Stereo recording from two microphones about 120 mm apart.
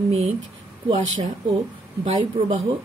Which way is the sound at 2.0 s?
60° right (ahead or behind).